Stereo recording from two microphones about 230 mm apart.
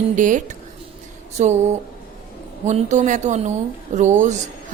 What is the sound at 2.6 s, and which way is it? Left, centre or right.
A woman's voice, right.